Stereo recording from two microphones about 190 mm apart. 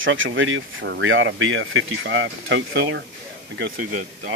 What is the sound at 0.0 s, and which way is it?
Speech, 90° right.